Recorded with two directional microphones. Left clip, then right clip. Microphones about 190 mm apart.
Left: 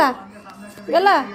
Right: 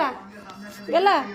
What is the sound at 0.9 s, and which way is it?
Speech, 10° left (ahead or behind).